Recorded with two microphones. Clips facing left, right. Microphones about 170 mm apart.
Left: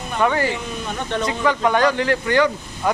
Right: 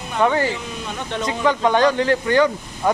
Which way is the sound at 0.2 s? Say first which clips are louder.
Right 1 dB; 15° right (ahead or behind).